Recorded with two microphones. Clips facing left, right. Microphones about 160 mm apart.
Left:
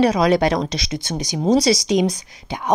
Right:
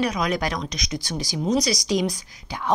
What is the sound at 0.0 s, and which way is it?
A woman's voice, 30° left (ahead or behind).